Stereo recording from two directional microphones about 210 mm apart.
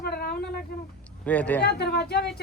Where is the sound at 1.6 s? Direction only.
50° left (ahead or behind).